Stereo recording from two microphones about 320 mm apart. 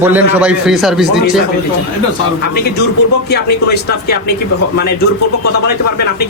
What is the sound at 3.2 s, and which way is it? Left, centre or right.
Speech, left.